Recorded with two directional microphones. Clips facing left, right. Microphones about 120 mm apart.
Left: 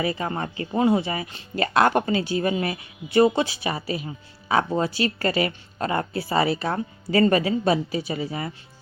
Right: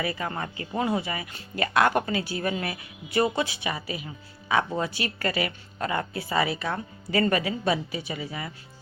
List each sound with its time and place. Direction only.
0.0 s speech: 25° left (ahead or behind)